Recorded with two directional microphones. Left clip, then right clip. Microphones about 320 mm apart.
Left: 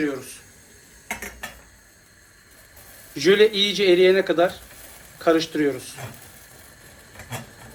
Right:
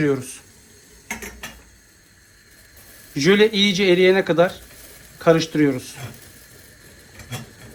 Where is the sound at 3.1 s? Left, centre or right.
Centre.